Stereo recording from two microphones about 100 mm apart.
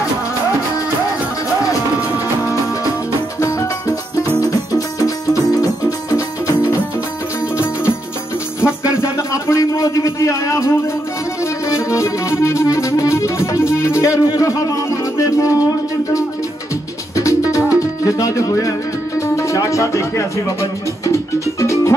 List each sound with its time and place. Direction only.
2.4 s music: 35° left (ahead or behind)
4.4 s music: 35° left (ahead or behind)
8.5 s music: 30° left (ahead or behind)
11.7 s music: 30° left (ahead or behind)
17.2 s music: 35° left (ahead or behind)